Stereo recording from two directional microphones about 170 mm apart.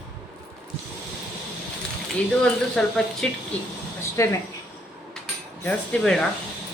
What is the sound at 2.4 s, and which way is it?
Speech, 5° left (ahead or behind).